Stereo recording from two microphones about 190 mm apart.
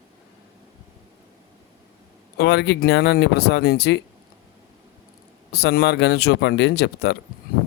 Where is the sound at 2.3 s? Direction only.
60° left (ahead or behind).